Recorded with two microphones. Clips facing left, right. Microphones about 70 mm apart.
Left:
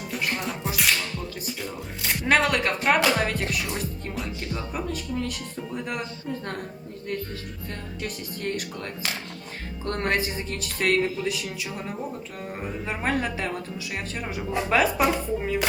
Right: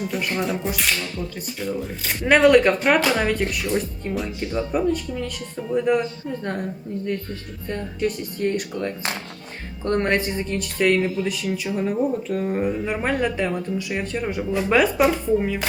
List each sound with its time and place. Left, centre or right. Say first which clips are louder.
0.0 s speech: right 5 dB; centre
7.7 s speech: right 11 dB; centre
11.9 s speech: right 11 dB; centre
12.8 s speech: right 4 dB; centre